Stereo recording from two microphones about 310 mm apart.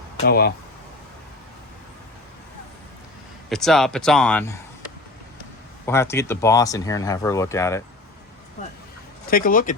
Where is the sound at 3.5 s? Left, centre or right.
Centre.